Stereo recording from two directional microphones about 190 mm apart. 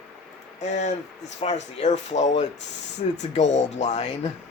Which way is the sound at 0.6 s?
40° left (ahead or behind).